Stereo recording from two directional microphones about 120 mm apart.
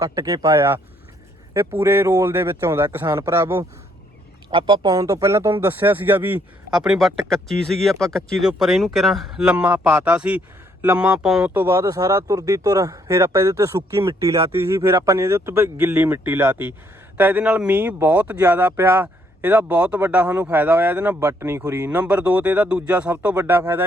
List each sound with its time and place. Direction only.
0.0 s speech: 30° right (ahead or behind)
1.5 s speech: 20° right (ahead or behind)
4.5 s speech: 40° right (ahead or behind); by 9.6 s 5° right (ahead or behind)
9.6 s speech: 20° right (ahead or behind)
11.5 s speech: 25° right (ahead or behind)